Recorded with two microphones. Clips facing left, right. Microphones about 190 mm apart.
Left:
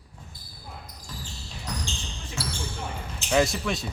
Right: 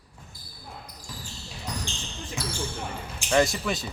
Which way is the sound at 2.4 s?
15° right (ahead or behind).